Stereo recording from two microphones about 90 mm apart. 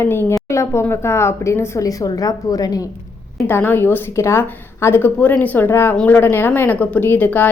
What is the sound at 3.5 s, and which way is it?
A woman's voice, 25° left (ahead or behind).